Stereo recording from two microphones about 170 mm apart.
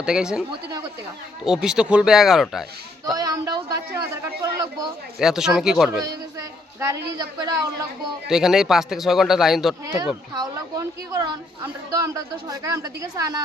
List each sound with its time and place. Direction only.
0.0 s speech: 5° right (ahead or behind)
1.6 s speech: 5° right (ahead or behind)
3.2 s speech: 20° right (ahead or behind)
5.2 s speech: 5° right (ahead or behind)
6.7 s a woman's voice: 15° right (ahead or behind)
8.3 s speech: centre (ahead or behind)
9.8 s a woman's voice: 20° right (ahead or behind)